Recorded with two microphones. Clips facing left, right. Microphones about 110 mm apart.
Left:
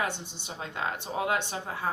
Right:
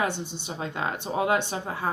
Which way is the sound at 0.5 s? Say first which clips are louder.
Right 3 dB; 25° right (ahead or behind).